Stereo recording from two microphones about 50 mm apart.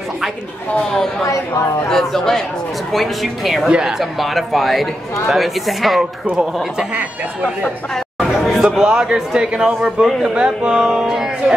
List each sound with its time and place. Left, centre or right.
1.3 s speech: left
1.9 s speech: centre
3.6 s speech: centre
4.0 s speech: centre
8.3 s chatter: centre
8.7 s a man's voice: centre